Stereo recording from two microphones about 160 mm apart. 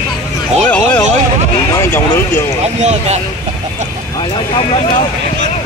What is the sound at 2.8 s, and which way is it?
Speech, 45° right (ahead or behind).